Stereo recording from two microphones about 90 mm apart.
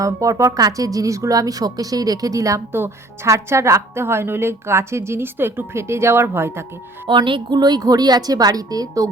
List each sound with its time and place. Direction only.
0.0 s a woman's voice: 35° right (ahead or behind)
7.1 s a woman's voice: 65° right (ahead or behind); by 9.0 s 45° right (ahead or behind)